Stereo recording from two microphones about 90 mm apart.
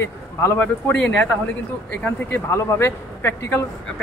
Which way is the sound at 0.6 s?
20° left (ahead or behind).